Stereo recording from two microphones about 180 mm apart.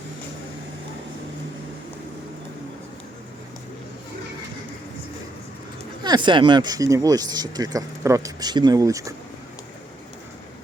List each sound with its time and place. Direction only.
6.0 s speech: 25° right (ahead or behind)